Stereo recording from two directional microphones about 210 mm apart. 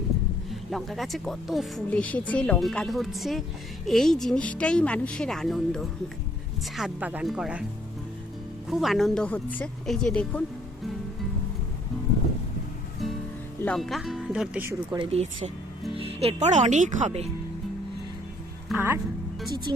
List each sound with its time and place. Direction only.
0.5 s speech: centre (ahead or behind)
8.7 s speech: centre (ahead or behind)
13.6 s speech: 5° left (ahead or behind)
14.9 s speech: 30° right (ahead or behind)
18.7 s speech: 10° right (ahead or behind)
19.7 s speech: 20° right (ahead or behind)